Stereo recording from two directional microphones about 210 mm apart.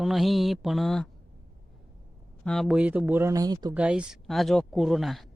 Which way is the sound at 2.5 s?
Centre (ahead or behind).